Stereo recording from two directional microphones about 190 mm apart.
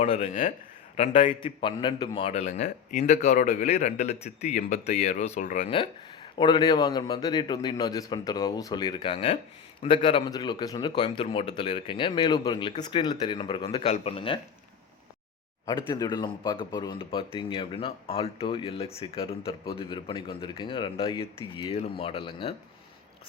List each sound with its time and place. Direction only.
0.0 s a man's voice: 35° left (ahead or behind)
2.6 s speech: 50° left (ahead or behind)
3.0 s a man's voice: 35° left (ahead or behind)
15.6 s a man's voice: 20° left (ahead or behind)